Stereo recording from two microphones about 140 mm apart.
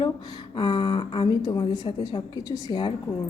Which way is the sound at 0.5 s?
35° left (ahead or behind).